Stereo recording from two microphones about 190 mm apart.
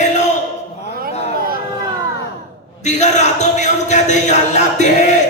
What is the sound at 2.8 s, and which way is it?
Speech, 40° left (ahead or behind).